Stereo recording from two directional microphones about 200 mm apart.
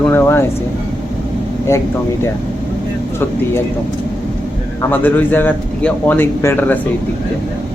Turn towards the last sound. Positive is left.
turn(degrees=10)  # may be behind; listen again after turning